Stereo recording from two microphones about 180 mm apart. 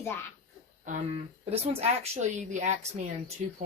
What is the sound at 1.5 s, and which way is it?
Speech, 35° right (ahead or behind).